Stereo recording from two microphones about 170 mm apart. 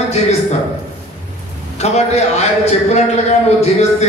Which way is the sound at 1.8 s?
40° left (ahead or behind).